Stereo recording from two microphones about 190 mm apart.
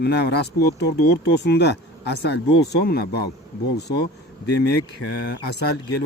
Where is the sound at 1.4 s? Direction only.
60° left (ahead or behind).